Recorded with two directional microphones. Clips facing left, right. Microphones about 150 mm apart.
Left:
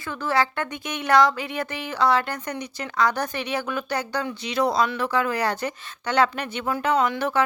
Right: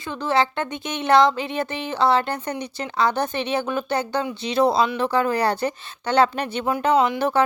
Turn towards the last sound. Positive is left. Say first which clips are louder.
# right 3 dB
turn(degrees=-30)  # may be behind; listen again after turning